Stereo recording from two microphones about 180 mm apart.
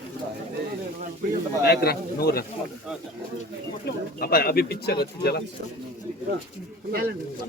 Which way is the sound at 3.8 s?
55° left (ahead or behind).